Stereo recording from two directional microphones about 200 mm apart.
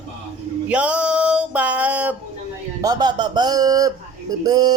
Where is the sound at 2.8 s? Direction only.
20° right (ahead or behind).